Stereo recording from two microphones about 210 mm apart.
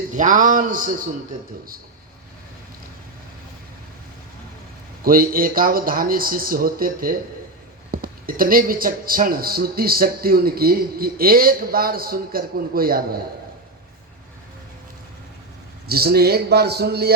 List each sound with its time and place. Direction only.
0.1 s a man's voice: 35° right (ahead or behind)
5.0 s speech: 45° right (ahead or behind)
15.9 s speech: 50° right (ahead or behind)